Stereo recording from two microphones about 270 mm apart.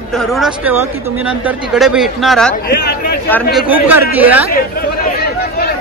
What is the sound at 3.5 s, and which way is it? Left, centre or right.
Speech, centre.